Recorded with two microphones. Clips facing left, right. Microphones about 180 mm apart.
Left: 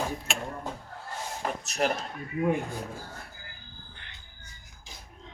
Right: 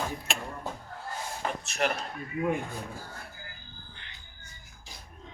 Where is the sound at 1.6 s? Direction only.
40° left (ahead or behind).